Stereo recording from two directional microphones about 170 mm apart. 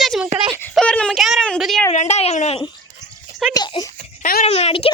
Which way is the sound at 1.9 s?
40° left (ahead or behind).